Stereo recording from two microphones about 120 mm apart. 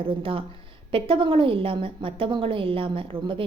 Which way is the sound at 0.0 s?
45° right (ahead or behind).